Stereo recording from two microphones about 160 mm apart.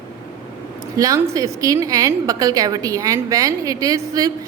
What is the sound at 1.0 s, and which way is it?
Speech, 20° right (ahead or behind).